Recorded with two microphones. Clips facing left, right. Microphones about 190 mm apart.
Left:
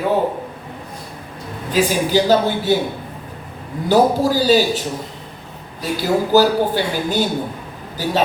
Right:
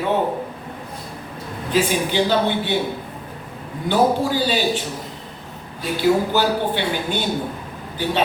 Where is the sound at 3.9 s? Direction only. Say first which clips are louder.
Left 3 dB; 40° left (ahead or behind).